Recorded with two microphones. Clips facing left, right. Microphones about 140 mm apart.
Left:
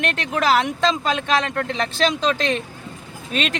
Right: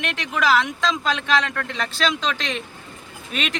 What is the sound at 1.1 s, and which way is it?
Speech, 50° left (ahead or behind).